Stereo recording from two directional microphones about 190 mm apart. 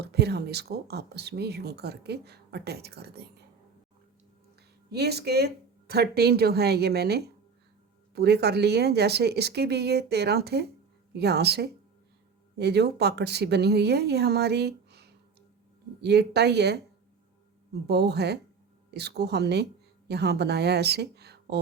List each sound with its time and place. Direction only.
0.0 s speech: 60° right (ahead or behind)
4.9 s speech: 60° right (ahead or behind)
17.8 s speech: 60° right (ahead or behind)